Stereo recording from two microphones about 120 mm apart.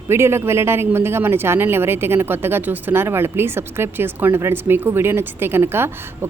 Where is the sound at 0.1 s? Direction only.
20° right (ahead or behind).